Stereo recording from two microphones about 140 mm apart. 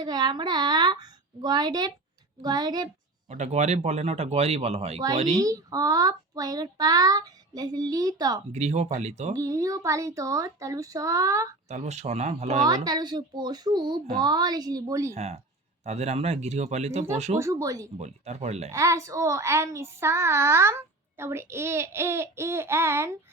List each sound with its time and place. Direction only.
0.0 s a child's voice: 30° right (ahead or behind)
3.2 s speech: 55° right (ahead or behind)
5.4 s a child's voice: 25° right (ahead or behind)
8.5 s speech: 55° right (ahead or behind)
9.3 s a child's voice: 25° right (ahead or behind)
11.7 s speech: 55° right (ahead or behind)
12.6 s a child's voice: 30° right (ahead or behind)
15.1 s speech: 50° right (ahead or behind)
17.3 s a child's voice: 20° right (ahead or behind)
17.9 s speech: 50° right (ahead or behind)
18.7 s a child's voice: 20° right (ahead or behind)